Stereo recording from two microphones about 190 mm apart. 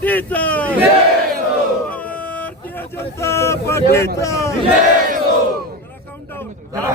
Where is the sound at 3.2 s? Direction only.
15° left (ahead or behind).